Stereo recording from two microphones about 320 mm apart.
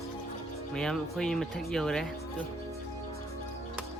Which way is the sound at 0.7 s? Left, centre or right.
Centre.